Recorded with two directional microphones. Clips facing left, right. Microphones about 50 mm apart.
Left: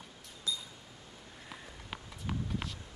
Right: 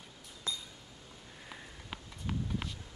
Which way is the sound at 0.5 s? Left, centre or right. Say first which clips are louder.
Left 2 dB; right.